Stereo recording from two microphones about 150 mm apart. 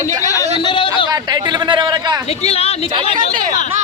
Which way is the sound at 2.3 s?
45° left (ahead or behind).